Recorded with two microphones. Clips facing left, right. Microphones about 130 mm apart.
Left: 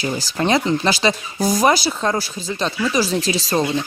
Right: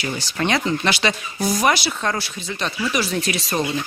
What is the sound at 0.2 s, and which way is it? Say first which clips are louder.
Speech: left 3 dB; 35° left (ahead or behind).